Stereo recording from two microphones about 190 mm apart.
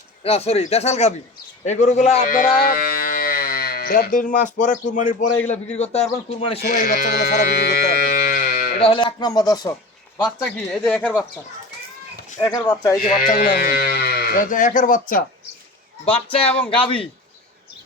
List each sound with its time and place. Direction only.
0.2 s speech: 30° left (ahead or behind)
2.3 s speech: 50° left (ahead or behind); by 6.6 s 30° left (ahead or behind)
6.6 s speech: 50° left (ahead or behind)
7.6 s a sound: 55° left (ahead or behind)
8.8 s a man's voice: 25° left (ahead or behind)
10.7 s speech: 5° left (ahead or behind)
12.4 s a man's voice: 20° left (ahead or behind)
13.2 s speech: 50° left (ahead or behind)
16.0 s a man's voice: 30° left (ahead or behind)